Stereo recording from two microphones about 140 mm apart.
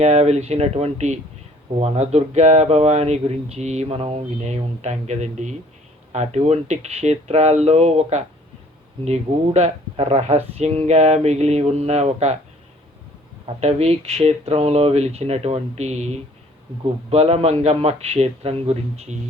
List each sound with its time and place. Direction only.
0.0 s speech: 50° right (ahead or behind)
13.6 s speech: 50° right (ahead or behind)
17.1 s speech: 45° right (ahead or behind)